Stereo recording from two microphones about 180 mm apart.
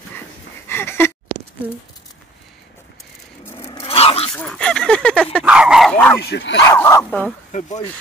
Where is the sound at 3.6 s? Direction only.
30° left (ahead or behind).